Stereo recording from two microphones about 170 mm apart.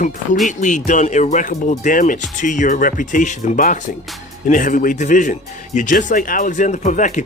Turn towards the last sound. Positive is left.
turn(degrees=45)  # may be behind; listen again after turning